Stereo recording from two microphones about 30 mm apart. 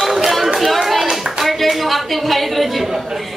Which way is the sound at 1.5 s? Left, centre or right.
Centre.